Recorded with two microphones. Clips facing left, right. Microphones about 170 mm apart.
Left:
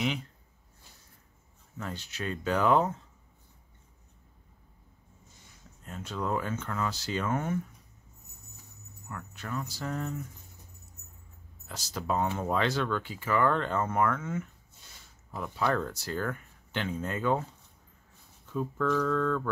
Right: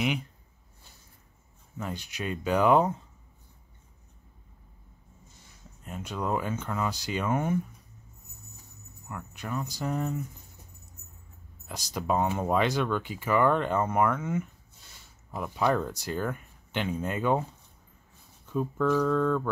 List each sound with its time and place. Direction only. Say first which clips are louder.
0.0 s speech: right 2 dB; 15° right (ahead or behind)
1.8 s speech: right 2 dB; 15° right (ahead or behind)
5.9 s speech: right 2 dB; 15° right (ahead or behind)
9.1 s speech: right 2 dB; 15° right (ahead or behind)
11.6 s speech: right 3 dB; 15° right (ahead or behind)
18.5 s speech: right 3 dB; 15° right (ahead or behind)